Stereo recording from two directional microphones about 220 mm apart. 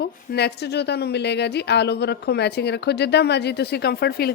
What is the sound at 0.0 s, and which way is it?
A woman's voice, 50° left (ahead or behind).